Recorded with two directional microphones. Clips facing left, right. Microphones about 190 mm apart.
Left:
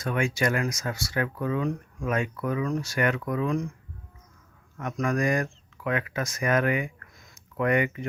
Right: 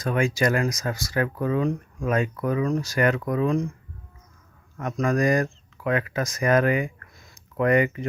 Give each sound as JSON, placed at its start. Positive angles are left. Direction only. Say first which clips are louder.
{"t": 0.0, "sound": "speech", "louder": "right 3 dB", "side_deg": -35}
{"t": 4.8, "sound": "speech", "louder": "right 4 dB", "side_deg": -35}